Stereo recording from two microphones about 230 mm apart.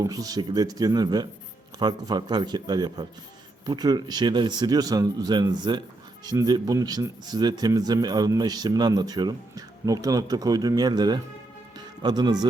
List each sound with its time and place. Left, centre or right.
0.0 s speech: centre